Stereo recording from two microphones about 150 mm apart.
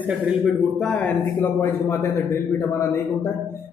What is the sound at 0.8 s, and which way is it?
A man's voice, 5° left (ahead or behind).